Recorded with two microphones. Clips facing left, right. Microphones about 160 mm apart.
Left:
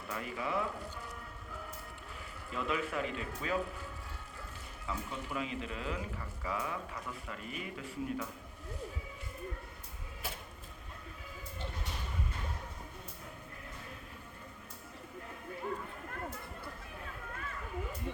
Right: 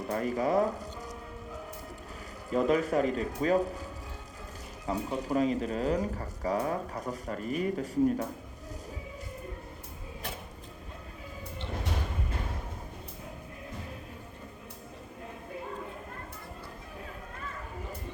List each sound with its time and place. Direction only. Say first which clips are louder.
0.1 s speech: right 9 dB; 40° right (ahead or behind)
2.5 s speech: right 10 dB; 40° right (ahead or behind)
4.9 s speech: right 9 dB; 40° right (ahead or behind)